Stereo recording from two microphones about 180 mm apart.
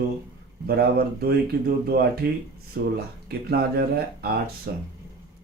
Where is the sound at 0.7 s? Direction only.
60° right (ahead or behind).